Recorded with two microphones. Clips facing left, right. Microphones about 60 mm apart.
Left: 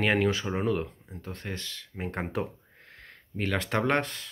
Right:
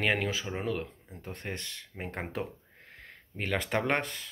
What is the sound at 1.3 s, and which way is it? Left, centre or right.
Speech, right.